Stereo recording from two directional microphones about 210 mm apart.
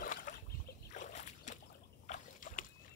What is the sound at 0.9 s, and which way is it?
Boat, 35° left (ahead or behind).